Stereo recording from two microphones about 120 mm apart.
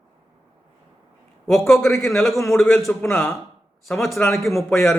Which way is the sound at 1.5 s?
5° left (ahead or behind).